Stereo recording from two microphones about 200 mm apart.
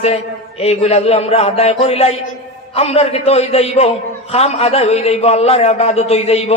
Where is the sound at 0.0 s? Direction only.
30° left (ahead or behind).